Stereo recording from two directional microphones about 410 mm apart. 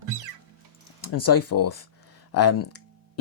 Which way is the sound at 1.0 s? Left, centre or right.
Left.